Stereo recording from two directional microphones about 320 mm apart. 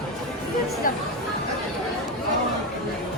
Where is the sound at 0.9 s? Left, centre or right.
Left.